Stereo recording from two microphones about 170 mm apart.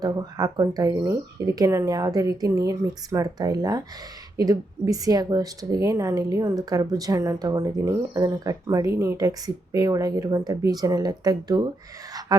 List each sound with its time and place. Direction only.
0.0 s speech: 20° right (ahead or behind)